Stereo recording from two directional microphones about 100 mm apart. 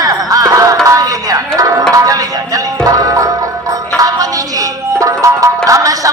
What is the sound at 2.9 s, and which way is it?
Music, 35° right (ahead or behind).